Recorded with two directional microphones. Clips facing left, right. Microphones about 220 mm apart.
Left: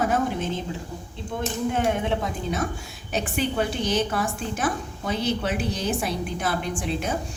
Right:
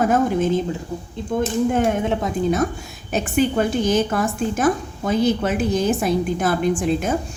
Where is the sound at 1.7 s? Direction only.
45° right (ahead or behind).